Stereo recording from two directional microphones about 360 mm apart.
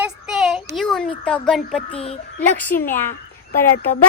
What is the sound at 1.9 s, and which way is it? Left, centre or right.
Speech, centre.